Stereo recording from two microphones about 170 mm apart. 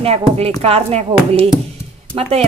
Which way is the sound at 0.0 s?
35° right (ahead or behind).